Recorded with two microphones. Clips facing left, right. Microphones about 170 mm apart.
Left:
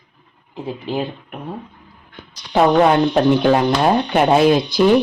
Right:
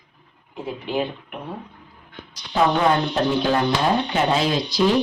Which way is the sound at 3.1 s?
65° left (ahead or behind).